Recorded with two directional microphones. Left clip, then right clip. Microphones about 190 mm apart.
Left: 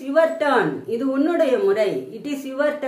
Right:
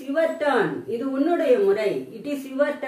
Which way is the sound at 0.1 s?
40° left (ahead or behind).